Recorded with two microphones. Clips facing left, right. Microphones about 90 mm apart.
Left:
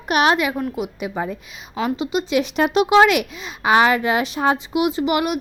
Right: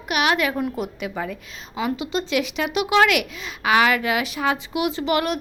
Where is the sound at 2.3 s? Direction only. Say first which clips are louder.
Left 7 dB; 40° left (ahead or behind).